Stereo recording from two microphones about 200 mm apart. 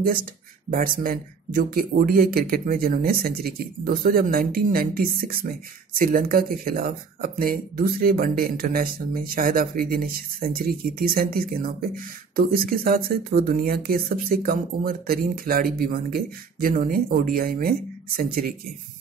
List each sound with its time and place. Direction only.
0.0 s speech: 45° right (ahead or behind)